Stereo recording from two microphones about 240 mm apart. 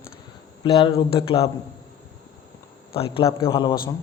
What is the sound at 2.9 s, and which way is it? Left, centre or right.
Speech, left.